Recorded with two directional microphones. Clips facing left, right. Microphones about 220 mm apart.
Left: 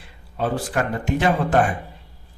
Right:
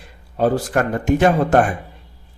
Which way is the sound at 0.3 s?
40° right (ahead or behind).